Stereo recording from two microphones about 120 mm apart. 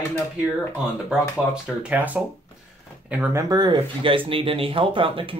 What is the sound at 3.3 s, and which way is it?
Speech, 35° right (ahead or behind).